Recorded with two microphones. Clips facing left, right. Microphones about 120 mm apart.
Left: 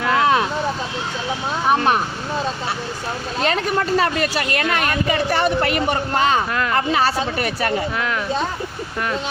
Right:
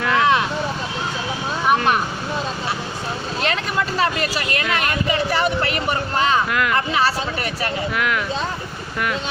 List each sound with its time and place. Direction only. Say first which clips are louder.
0.1 s vehicle: left 1 dB; 35° left (ahead or behind)
3.4 s speech: left 4 dB; 40° left (ahead or behind)
7.9 s speech: right 1 dB; 30° left (ahead or behind)